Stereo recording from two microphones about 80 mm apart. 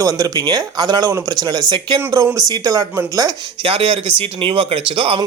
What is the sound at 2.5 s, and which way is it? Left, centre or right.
Speech, right.